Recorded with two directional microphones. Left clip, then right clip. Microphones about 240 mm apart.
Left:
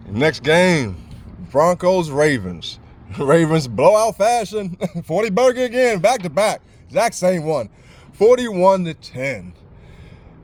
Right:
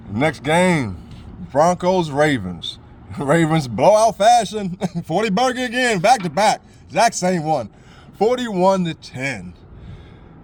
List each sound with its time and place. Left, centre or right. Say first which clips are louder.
0.1 s speech: left 3 dB; left
1.5 s a man's voice: left 1 dB; centre